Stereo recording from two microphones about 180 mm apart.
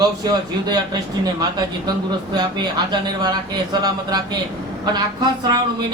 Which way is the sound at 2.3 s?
25° right (ahead or behind).